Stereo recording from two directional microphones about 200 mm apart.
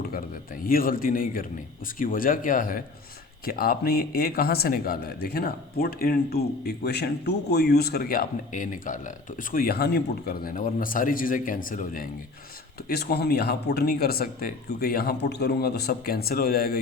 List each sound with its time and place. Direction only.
0.6 s speech: 45° left (ahead or behind)